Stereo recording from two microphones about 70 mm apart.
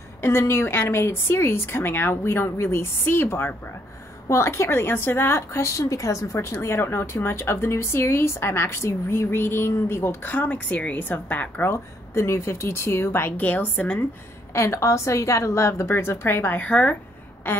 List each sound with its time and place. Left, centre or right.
0.2 s speech: left
14.5 s a woman's voice: left
17.4 s a sound: left